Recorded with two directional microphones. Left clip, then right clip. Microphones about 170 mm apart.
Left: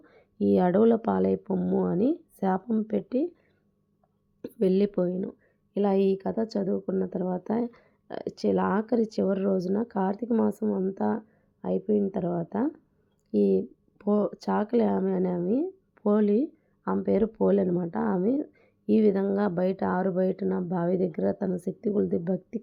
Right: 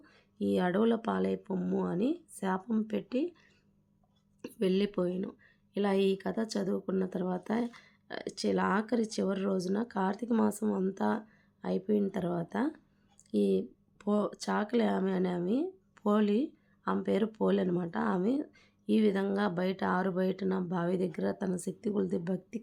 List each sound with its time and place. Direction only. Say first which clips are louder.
0.0 s speech: left 7 dB; 35° left (ahead or behind)
4.4 s speech: left 6 dB; 30° left (ahead or behind)